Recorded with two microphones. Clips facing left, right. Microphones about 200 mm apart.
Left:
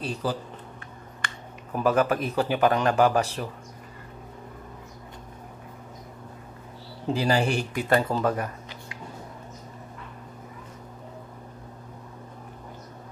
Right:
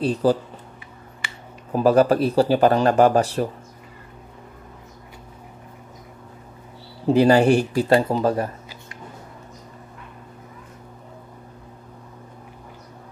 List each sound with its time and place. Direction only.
0.0 s speech: 40° right (ahead or behind)
1.2 s a sound: 5° right (ahead or behind)
1.7 s speech: 35° right (ahead or behind)
7.2 s speech: 55° right (ahead or behind)
7.7 s speech: 35° right (ahead or behind)